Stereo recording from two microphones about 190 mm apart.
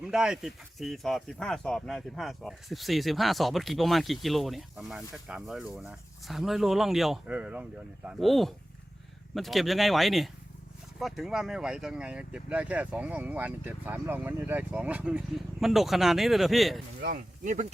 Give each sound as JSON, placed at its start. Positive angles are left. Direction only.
{"t": 0.0, "sound": "speech", "side_deg": -5}
{"t": 17.0, "sound": "speech", "side_deg": -45}